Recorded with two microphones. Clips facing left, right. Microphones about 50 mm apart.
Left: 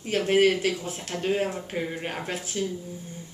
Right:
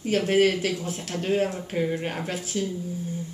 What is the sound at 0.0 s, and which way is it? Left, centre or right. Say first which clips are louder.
Speech: even; centre.